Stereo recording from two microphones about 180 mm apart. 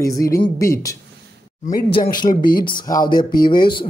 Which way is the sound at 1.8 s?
30° left (ahead or behind).